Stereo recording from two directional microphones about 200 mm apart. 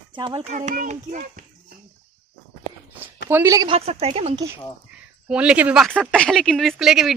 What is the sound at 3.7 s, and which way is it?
Speech, 30° right (ahead or behind).